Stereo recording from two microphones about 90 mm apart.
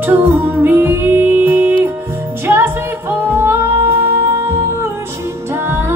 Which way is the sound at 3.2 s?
25° right (ahead or behind).